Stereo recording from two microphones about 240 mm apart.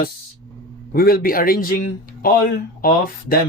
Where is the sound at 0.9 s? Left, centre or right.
Left.